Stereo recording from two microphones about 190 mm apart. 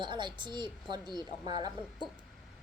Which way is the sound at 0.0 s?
25° right (ahead or behind).